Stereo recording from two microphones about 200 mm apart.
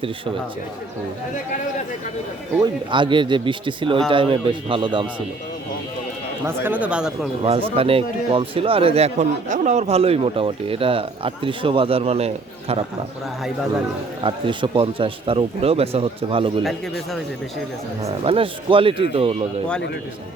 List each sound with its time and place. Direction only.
2.6 s speech: 25° right (ahead or behind)
6.4 s speech: 10° right (ahead or behind)
7.4 s speech: 30° right (ahead or behind)
14.3 s speech: 25° right (ahead or behind)
18.0 s speech: 30° right (ahead or behind)